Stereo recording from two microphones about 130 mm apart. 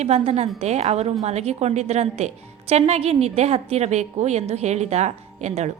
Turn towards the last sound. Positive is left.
turn(degrees=-60)  # may be behind; listen again after turning